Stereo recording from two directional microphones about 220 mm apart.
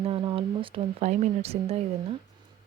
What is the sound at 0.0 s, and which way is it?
Speech, 25° right (ahead or behind).